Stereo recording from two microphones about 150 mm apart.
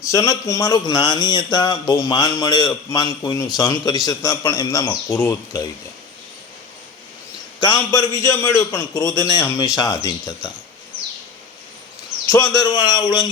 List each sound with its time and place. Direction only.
0.0 s a man's voice: 25° left (ahead or behind)
7.9 s a man's voice: 20° left (ahead or behind)
12.3 s a man's voice: 30° left (ahead or behind)